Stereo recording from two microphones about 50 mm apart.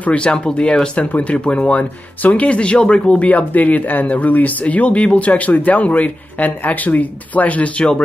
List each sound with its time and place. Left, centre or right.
0.0 s speech: left